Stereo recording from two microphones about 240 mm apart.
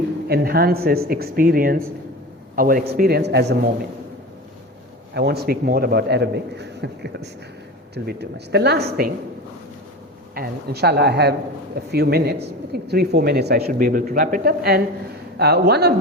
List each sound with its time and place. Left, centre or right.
0.3 s a man's voice: right
5.1 s a man's voice: right
10.3 s a man's voice: right